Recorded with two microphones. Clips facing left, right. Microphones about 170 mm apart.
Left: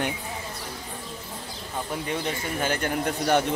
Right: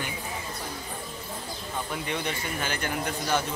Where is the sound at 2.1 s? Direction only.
50° left (ahead or behind).